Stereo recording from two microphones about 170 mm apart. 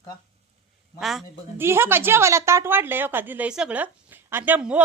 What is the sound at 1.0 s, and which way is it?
Speech, centre (ahead or behind).